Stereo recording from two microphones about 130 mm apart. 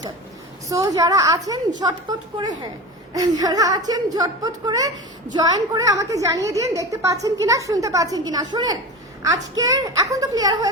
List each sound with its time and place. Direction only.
0.7 s a woman's voice: 25° right (ahead or behind)